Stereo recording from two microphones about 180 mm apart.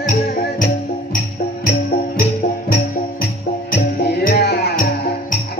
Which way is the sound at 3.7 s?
55° left (ahead or behind).